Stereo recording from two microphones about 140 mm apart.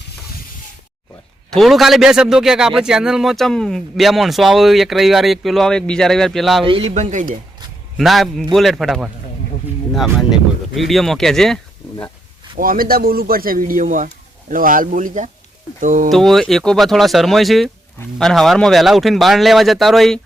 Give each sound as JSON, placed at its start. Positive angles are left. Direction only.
{"t": 1.5, "sound": "a man's voice", "side_deg": 0}
{"t": 6.7, "sound": "speech", "side_deg": -40}
{"t": 6.9, "sound": "speech", "side_deg": -60}
{"t": 7.9, "sound": "a man's voice", "side_deg": 0}
{"t": 12.5, "sound": "a man's voice", "side_deg": -90}
{"t": 16.0, "sound": "a man's voice", "side_deg": 0}